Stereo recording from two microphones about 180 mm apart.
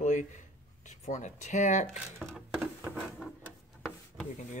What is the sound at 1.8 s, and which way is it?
Speech, 5° left (ahead or behind).